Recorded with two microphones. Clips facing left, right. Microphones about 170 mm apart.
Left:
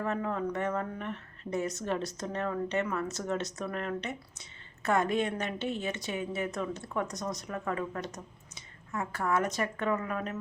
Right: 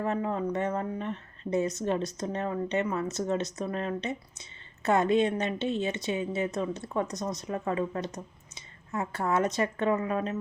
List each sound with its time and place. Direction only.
0.0 s speech: 20° right (ahead or behind)